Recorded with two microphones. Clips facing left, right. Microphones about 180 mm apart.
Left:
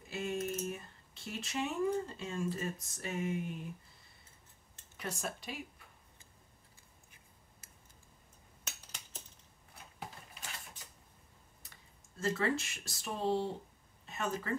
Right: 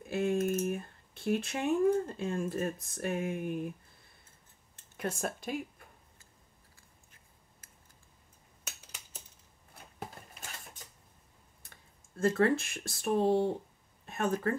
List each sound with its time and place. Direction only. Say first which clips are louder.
0.0 s speech: right 7 dB; 55° right (ahead or behind)
4.9 s speech: right 6 dB; 50° right (ahead or behind)
8.6 s a sound: right 1 dB; 10° right (ahead or behind)
12.2 s speech: right 7 dB; 55° right (ahead or behind)